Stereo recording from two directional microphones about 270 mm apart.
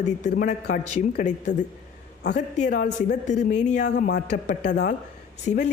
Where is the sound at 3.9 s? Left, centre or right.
Left.